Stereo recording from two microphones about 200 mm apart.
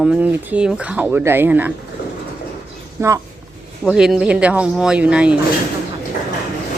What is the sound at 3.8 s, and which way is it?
Speech, 5° right (ahead or behind).